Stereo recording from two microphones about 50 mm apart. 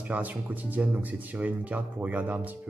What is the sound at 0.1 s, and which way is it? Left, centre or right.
Speech, right.